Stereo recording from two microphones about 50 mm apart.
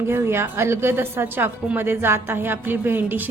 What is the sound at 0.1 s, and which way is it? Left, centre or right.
A woman's voice, right.